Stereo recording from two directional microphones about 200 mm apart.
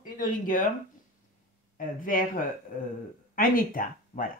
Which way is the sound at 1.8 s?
40° left (ahead or behind).